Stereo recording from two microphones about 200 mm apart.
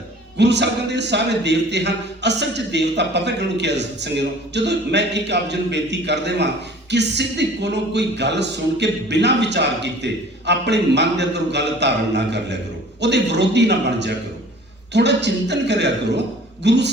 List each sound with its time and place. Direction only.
0.3 s a man's voice: 60° right (ahead or behind)